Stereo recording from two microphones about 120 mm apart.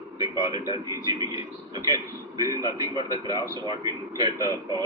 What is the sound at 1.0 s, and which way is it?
A man's voice, 35° right (ahead or behind).